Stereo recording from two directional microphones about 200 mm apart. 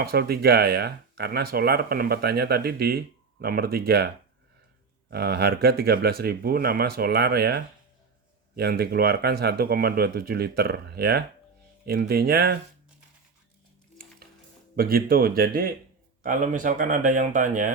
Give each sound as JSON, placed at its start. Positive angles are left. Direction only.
{"t": 0.0, "sound": "speech", "side_deg": -50}
{"t": 5.1, "sound": "speech", "side_deg": -50}
{"t": 14.8, "sound": "speech", "side_deg": -50}